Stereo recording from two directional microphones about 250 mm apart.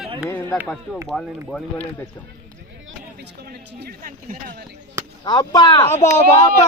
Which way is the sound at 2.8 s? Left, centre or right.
Right.